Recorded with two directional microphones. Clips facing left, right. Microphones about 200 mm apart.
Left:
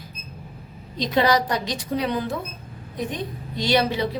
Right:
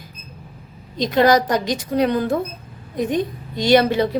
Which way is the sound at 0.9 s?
45° right (ahead or behind).